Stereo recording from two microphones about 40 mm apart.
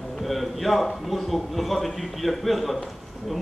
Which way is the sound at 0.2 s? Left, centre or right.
Centre.